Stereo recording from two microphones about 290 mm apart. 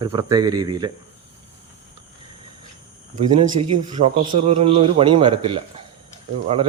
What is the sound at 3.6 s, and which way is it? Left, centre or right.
A man's voice, right.